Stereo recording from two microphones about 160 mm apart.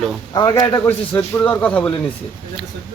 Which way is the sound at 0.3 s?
25° left (ahead or behind).